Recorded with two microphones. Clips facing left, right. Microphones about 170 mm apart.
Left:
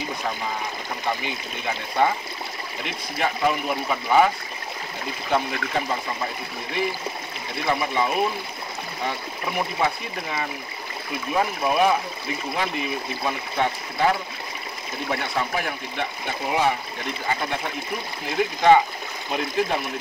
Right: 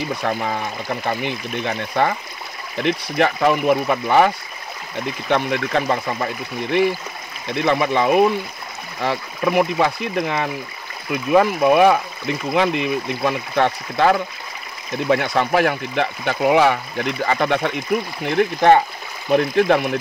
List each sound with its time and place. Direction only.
0.2 s speech: 65° right (ahead or behind)
5.3 s speech: 75° right (ahead or behind)
7.6 s speech: 70° right (ahead or behind)
18.2 s speech: 60° right (ahead or behind)